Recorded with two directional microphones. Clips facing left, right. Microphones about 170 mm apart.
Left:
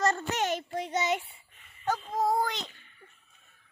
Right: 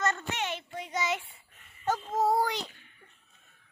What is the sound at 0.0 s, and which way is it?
Child singing, 35° left (ahead or behind).